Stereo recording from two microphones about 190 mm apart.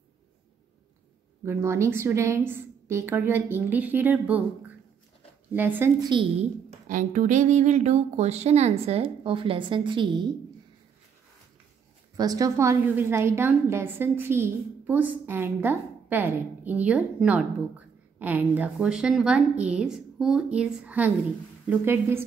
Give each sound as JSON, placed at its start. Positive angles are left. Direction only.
{"t": 1.4, "sound": "a woman's voice", "side_deg": -15}
{"t": 6.9, "sound": "speech", "side_deg": -40}
{"t": 12.2, "sound": "a woman's voice", "side_deg": -20}